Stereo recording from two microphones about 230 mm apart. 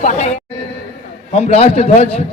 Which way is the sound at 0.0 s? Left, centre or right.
Left.